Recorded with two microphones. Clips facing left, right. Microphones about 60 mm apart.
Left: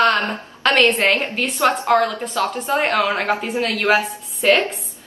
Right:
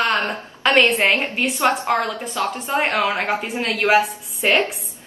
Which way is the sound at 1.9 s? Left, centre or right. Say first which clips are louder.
Left 4 dB; centre.